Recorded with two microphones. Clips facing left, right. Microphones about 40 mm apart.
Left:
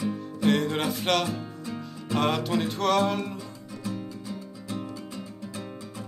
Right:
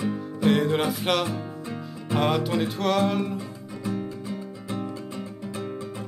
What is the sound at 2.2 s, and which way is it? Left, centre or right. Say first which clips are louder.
Music: right 2 dB; centre.